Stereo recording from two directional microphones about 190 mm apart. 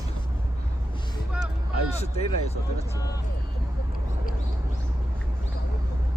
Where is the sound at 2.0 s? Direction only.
35° left (ahead or behind).